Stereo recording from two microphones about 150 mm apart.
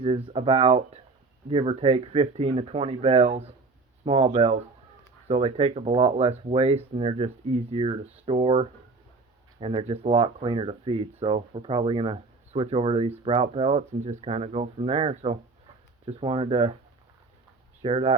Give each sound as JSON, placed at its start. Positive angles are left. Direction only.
{"t": 0.3, "sound": "speech", "side_deg": -35}
{"t": 17.8, "sound": "speech", "side_deg": -40}